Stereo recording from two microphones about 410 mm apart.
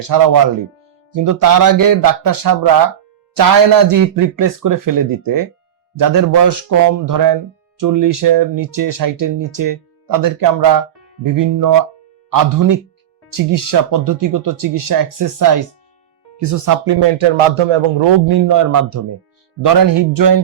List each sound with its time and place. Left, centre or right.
0.0 s speech: right
16.8 s speech: right
18.0 s speech: right
19.6 s speech: right